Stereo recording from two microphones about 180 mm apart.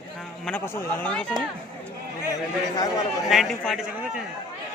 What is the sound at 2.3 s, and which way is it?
Speech, 20° left (ahead or behind).